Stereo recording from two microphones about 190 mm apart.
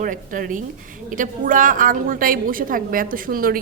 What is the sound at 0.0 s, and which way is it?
A woman's voice, 45° right (ahead or behind).